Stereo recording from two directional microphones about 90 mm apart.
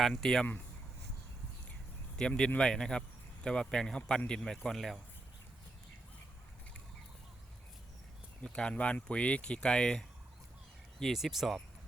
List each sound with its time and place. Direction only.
0.0 s speech: 5° left (ahead or behind)
2.1 s speech: 10° left (ahead or behind)
8.4 s speech: 10° left (ahead or behind)
11.0 s speech: centre (ahead or behind)